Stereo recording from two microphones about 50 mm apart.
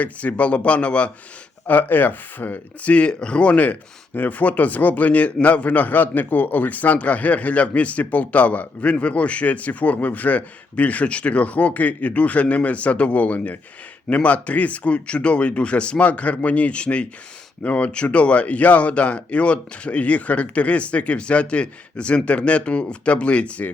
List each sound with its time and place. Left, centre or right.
0.0 s speech: left
1.6 s speech: left